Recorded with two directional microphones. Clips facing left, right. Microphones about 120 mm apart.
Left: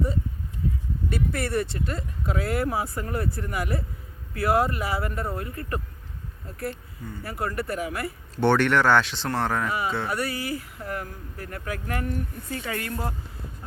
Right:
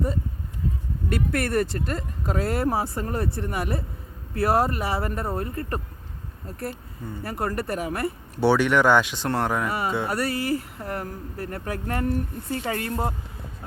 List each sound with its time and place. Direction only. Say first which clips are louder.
1.1 s speech: right 3 dB; 65° right (ahead or behind); by 5.8 s 35° right (ahead or behind)
7.0 s speech: right 2 dB; 20° right (ahead or behind)
7.3 s speech: right 1 dB; 35° right (ahead or behind)
8.4 s speech: right 1 dB; 10° right (ahead or behind)
9.6 s speech: right 1 dB; 40° right (ahead or behind)